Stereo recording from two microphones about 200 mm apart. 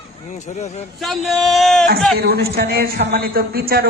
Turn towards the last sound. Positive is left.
turn(degrees=-50)  # may be behind; listen again after turning